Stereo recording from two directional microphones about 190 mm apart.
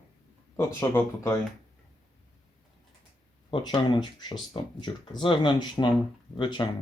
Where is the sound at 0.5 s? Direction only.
15° left (ahead or behind).